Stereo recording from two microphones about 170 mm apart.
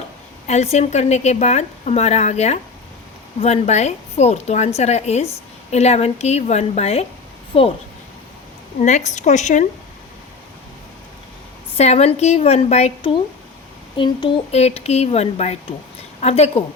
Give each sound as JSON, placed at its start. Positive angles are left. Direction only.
{"t": 0.4, "sound": "a woman's voice", "side_deg": 40}
{"t": 8.8, "sound": "a woman's voice", "side_deg": 45}
{"t": 11.8, "sound": "a woman's voice", "side_deg": 40}